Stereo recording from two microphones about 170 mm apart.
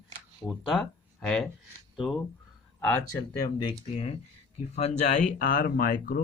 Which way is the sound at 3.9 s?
35° left (ahead or behind).